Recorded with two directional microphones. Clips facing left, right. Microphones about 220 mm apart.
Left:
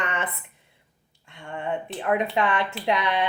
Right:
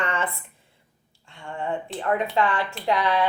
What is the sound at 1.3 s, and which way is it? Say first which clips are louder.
Speech: even; 20° left (ahead or behind).